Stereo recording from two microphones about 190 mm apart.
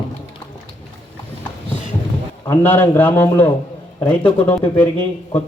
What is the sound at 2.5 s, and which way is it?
A man's voice, 10° left (ahead or behind).